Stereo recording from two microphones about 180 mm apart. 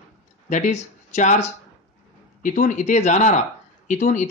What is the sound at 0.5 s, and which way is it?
Speech, 40° left (ahead or behind).